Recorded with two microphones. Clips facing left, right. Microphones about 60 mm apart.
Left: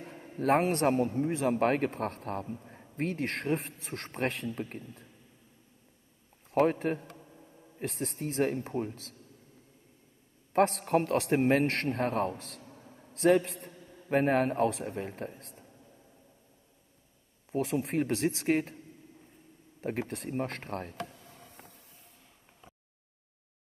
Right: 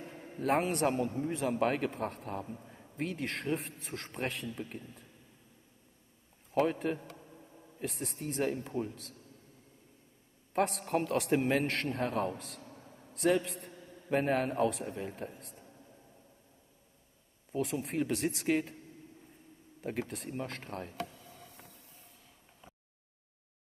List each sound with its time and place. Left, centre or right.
0.4 s a man's voice: left
6.5 s a man's voice: left
7.8 s a man's voice: left
10.5 s a man's voice: left
11.3 s a man's voice: left
17.5 s a man's voice: left
19.8 s speech: left
20.1 s speech: left